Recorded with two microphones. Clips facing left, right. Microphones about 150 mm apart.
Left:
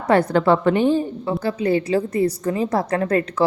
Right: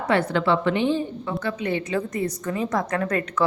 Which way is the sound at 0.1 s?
40° left (ahead or behind).